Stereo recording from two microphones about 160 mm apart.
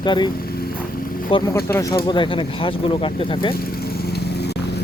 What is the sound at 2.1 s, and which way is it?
Speech, 30° left (ahead or behind).